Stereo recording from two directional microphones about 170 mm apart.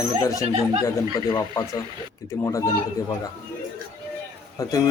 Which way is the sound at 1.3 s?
25° left (ahead or behind).